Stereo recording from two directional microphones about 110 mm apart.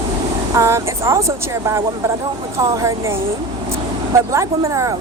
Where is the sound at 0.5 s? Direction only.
25° right (ahead or behind).